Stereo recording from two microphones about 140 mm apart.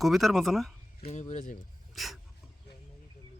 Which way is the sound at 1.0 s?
55° left (ahead or behind).